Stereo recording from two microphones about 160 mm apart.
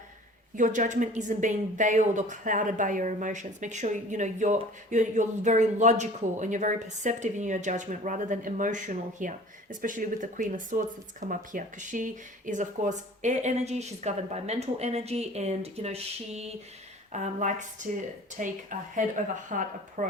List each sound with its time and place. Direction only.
0.5 s speech: 55° right (ahead or behind)